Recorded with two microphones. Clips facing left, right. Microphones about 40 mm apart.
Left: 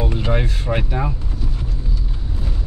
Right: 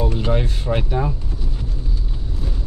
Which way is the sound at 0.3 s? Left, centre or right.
Left.